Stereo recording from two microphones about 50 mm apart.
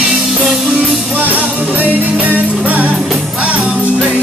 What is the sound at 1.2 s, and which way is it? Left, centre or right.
Music, right.